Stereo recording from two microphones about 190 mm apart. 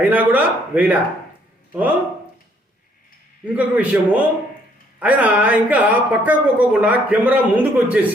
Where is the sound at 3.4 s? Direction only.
10° right (ahead or behind).